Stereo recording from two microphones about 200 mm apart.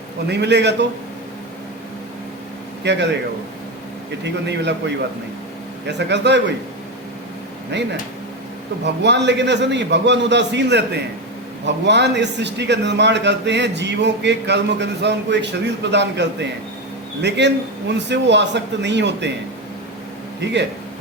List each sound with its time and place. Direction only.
0.3 s a man's voice: 60° right (ahead or behind)
2.8 s a man's voice: 60° right (ahead or behind)
4.2 s a man's voice: 60° right (ahead or behind)
5.8 s a man's voice: 60° right (ahead or behind)
8.8 s a man's voice: 60° right (ahead or behind)
20.4 s a man's voice: 60° right (ahead or behind)